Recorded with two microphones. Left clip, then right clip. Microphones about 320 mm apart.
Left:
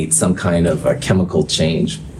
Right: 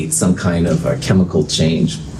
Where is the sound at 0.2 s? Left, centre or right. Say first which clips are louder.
Left 1 dB; left.